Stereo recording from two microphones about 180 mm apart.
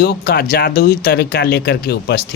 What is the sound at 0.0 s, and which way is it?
Speech, 65° left (ahead or behind).